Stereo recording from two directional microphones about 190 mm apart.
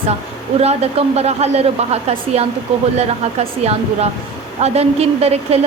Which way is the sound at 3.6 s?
35° right (ahead or behind).